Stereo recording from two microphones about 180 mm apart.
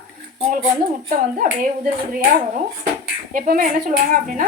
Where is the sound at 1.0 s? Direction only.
50° right (ahead or behind).